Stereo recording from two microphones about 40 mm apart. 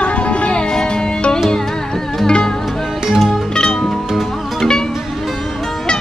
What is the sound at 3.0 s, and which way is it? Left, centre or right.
Music, centre.